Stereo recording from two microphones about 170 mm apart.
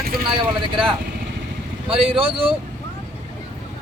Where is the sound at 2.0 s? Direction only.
30° right (ahead or behind).